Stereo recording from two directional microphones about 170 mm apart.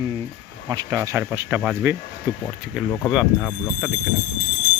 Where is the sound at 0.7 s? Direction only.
20° right (ahead or behind).